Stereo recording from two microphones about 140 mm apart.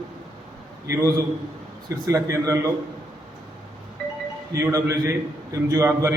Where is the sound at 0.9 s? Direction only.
25° right (ahead or behind).